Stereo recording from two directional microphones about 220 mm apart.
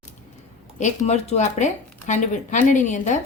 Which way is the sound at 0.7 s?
30° left (ahead or behind).